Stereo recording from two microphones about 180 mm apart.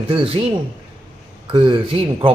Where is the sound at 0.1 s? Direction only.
30° right (ahead or behind).